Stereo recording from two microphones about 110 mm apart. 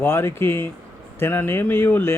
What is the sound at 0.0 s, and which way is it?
Speech, 20° left (ahead or behind).